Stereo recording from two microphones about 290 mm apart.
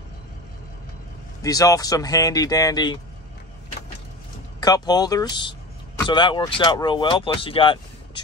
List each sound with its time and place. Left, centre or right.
1.4 s speech: centre
4.6 s speech: centre